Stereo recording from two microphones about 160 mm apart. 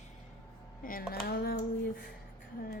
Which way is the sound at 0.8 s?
65° left (ahead or behind).